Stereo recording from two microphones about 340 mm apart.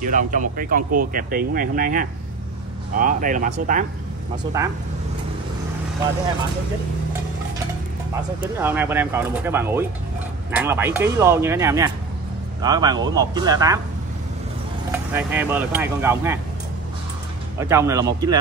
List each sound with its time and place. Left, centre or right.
0.0 s speech: right
8.4 s speech: centre
14.9 s speech: centre
17.6 s speech: centre